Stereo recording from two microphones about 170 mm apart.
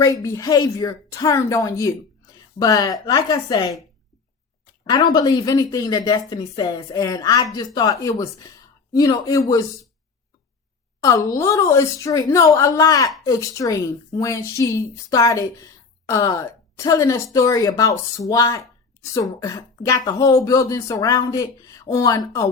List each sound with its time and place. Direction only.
0.0 s a woman's voice: 20° left (ahead or behind)
11.3 s a woman's voice: 15° left (ahead or behind)